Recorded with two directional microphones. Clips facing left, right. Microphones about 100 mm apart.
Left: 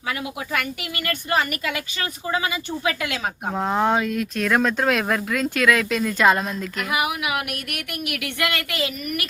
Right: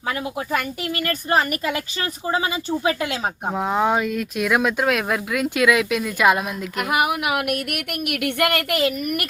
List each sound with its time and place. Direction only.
1.0 s speech: 35° right (ahead or behind)
3.5 s speech: 5° right (ahead or behind)
6.9 s speech: 45° right (ahead or behind)